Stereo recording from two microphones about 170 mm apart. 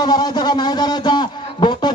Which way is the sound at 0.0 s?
25° left (ahead or behind).